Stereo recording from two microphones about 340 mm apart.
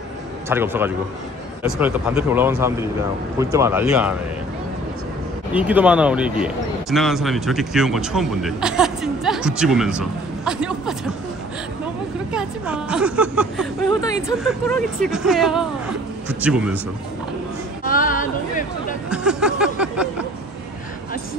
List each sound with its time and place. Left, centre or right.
0.5 s speech: centre
5.5 s speech: centre
12.3 s speech: centre
17.8 s speech: left
19.0 s a sound: centre